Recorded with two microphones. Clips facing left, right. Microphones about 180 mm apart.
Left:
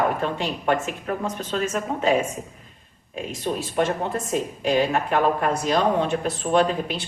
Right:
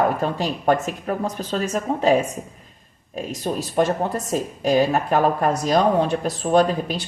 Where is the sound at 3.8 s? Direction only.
40° right (ahead or behind).